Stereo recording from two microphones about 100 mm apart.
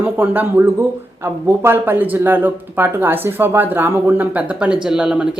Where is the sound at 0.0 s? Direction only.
20° right (ahead or behind).